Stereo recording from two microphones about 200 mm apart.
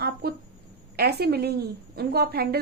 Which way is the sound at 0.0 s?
50° right (ahead or behind).